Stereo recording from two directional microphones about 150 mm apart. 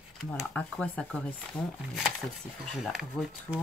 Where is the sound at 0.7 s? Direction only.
5° left (ahead or behind).